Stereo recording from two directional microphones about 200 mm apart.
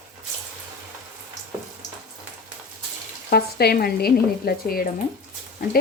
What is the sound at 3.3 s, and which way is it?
Frying, 50° left (ahead or behind).